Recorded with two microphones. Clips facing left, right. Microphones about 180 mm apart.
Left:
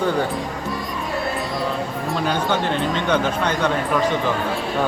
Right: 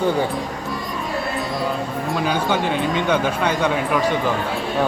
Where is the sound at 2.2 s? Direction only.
5° right (ahead or behind).